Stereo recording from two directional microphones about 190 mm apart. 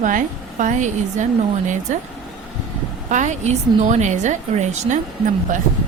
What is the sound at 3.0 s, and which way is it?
A woman's voice, 40° right (ahead or behind).